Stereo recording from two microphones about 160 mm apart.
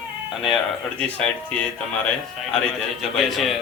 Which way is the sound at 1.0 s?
5° left (ahead or behind).